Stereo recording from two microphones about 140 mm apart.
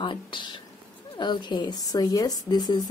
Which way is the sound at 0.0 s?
35° left (ahead or behind).